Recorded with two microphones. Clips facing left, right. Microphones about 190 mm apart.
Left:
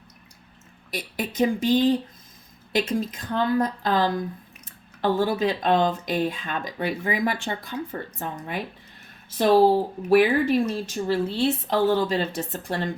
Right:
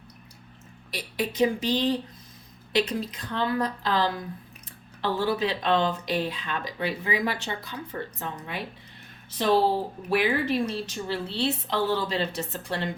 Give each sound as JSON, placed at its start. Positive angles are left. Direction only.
{"t": 0.9, "sound": "speech", "side_deg": 50}
{"t": 9.4, "sound": "speech", "side_deg": 45}